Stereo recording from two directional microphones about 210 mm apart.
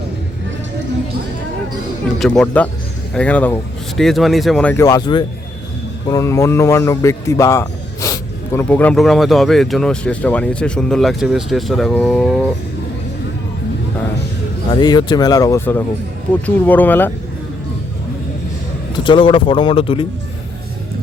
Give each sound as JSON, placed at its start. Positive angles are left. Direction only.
{"t": 2.1, "sound": "a man's voice", "side_deg": 0}
{"t": 14.8, "sound": "speech", "side_deg": 20}
{"t": 19.0, "sound": "speech", "side_deg": 25}